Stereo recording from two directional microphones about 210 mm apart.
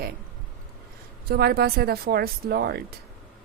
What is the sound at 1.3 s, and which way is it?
Speech, 50° right (ahead or behind).